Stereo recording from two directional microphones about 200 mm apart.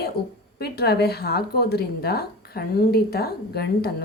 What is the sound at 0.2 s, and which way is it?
Speech, 50° left (ahead or behind).